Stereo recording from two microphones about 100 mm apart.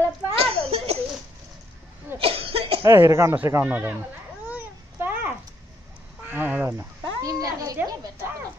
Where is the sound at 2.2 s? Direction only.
70° right (ahead or behind).